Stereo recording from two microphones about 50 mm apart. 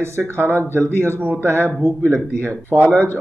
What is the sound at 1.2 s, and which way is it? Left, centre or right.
Speech, right.